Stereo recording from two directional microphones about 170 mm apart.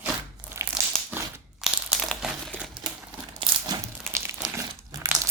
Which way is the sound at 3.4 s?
30° right (ahead or behind).